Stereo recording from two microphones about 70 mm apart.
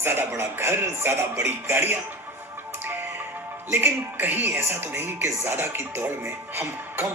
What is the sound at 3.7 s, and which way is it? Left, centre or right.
Speech, right.